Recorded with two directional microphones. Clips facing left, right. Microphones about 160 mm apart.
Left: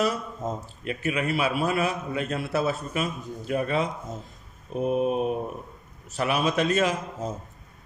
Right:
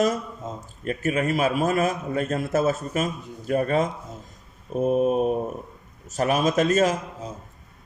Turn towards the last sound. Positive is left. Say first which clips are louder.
# left 4 dB
turn(degrees=45)  # may be behind; listen again after turning